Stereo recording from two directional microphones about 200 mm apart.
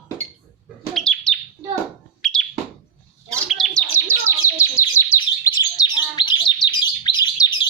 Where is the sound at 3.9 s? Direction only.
15° left (ahead or behind).